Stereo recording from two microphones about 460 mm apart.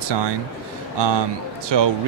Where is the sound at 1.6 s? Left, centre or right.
Right.